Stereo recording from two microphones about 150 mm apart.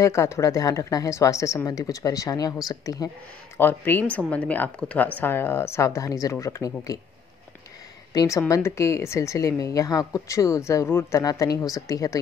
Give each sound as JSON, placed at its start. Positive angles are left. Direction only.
{"t": 0.0, "sound": "speech", "side_deg": 20}
{"t": 3.5, "sound": "speech", "side_deg": 15}
{"t": 8.1, "sound": "speech", "side_deg": 20}